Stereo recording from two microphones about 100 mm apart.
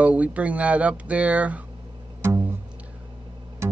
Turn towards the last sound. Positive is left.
turn(degrees=-30)  # may be behind; listen again after turning